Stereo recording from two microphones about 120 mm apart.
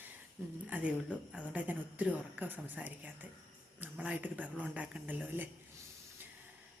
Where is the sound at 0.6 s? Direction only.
10° right (ahead or behind).